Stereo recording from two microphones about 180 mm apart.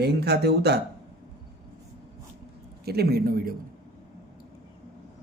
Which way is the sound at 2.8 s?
60° right (ahead or behind).